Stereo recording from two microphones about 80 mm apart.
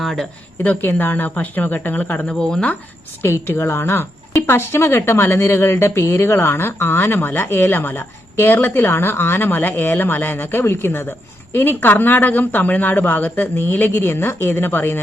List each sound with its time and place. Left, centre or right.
0.0 s speech: centre
0.6 s speech: centre
2.2 s speech: centre
3.2 s speech: left